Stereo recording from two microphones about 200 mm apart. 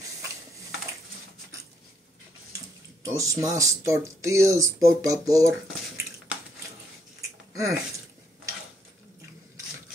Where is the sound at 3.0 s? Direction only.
15° right (ahead or behind).